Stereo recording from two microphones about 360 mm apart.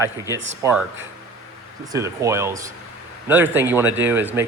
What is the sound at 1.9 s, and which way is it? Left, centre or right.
Speech, centre.